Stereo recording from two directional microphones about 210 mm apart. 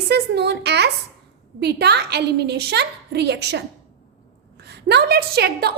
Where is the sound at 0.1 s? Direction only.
55° right (ahead or behind).